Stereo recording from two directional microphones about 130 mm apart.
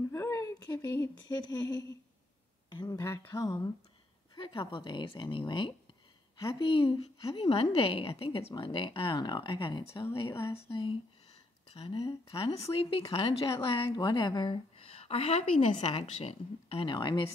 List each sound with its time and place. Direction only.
0.1 s a sound: 25° left (ahead or behind)
1.3 s a woman's voice: 30° left (ahead or behind)
4.4 s a woman's voice: 35° left (ahead or behind)
7.3 s speech: 45° left (ahead or behind)
12.3 s speech: 45° left (ahead or behind)